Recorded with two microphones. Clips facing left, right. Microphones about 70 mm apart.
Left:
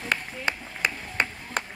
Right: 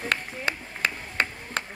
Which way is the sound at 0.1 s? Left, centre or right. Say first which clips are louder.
Left 2 dB; centre.